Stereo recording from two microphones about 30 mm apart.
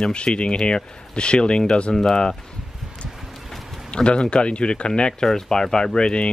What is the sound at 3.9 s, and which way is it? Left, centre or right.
Speech, left.